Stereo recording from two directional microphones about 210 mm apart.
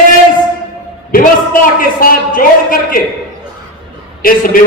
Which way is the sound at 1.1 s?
40° left (ahead or behind).